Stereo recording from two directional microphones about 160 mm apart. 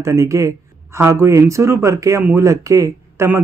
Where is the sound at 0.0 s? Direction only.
20° right (ahead or behind).